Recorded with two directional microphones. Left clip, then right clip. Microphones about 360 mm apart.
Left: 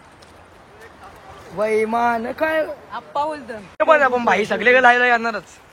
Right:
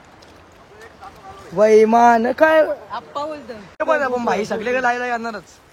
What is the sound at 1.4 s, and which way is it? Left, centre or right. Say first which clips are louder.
A man's voice: right 7 dB; right.